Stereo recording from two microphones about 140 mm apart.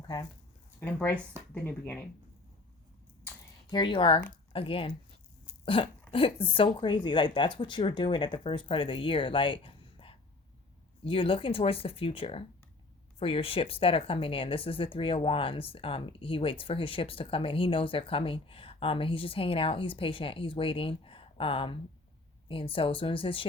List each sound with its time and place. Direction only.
0.1 s speech: 30° left (ahead or behind)
0.8 s speech: 10° left (ahead or behind)
3.7 s speech: 35° left (ahead or behind)